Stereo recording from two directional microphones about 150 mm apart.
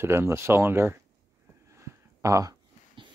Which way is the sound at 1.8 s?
20° right (ahead or behind).